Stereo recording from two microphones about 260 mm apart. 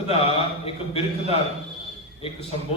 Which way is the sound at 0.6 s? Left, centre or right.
Left.